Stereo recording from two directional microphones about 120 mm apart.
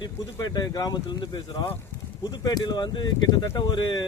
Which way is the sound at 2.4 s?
35° left (ahead or behind).